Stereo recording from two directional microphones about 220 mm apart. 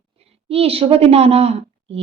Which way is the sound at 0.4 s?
25° right (ahead or behind).